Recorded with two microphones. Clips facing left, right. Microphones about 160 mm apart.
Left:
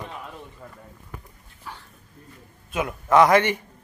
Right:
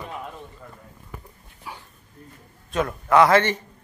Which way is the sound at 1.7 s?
10° right (ahead or behind).